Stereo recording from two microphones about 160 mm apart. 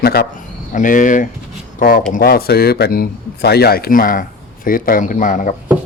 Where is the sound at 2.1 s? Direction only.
70° left (ahead or behind).